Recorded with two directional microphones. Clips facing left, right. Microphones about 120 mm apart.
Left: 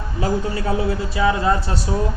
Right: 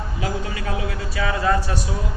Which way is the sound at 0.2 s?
30° left (ahead or behind).